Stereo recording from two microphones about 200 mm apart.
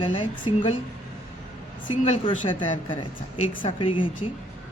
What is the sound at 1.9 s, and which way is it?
Speech, 25° left (ahead or behind).